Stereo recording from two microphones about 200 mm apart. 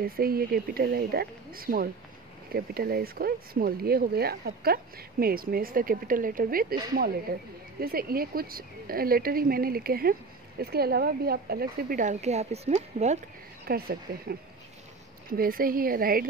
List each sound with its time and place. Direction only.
0.0 s speech: 50° right (ahead or behind)
13.7 s speech: 50° right (ahead or behind)
15.3 s speech: 45° right (ahead or behind)